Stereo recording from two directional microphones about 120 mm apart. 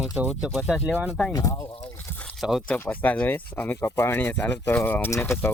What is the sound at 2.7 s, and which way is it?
Speech, 15° left (ahead or behind).